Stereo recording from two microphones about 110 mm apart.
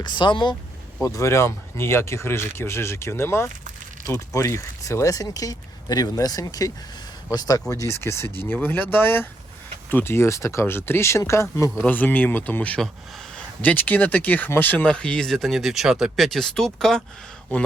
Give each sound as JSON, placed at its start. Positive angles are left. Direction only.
{"t": 0.0, "sound": "speech", "side_deg": 45}
{"t": 1.0, "sound": "speech", "side_deg": 30}
{"t": 11.8, "sound": "speech", "side_deg": 15}